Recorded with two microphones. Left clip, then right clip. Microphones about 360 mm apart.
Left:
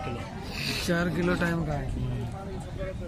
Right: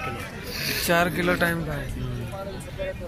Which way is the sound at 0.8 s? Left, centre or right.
Centre.